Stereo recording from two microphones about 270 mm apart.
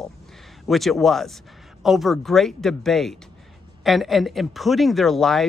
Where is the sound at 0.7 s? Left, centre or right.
Centre.